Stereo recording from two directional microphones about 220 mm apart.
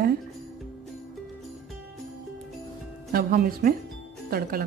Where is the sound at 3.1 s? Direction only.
45° right (ahead or behind).